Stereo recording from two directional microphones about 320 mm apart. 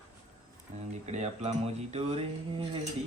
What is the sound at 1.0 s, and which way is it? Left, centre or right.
Speech, right.